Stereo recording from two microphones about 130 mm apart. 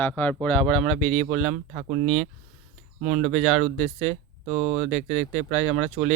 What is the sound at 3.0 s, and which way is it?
Speech, 65° right (ahead or behind).